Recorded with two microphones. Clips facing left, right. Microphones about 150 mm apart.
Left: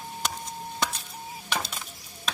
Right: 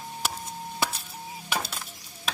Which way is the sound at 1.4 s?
5° right (ahead or behind).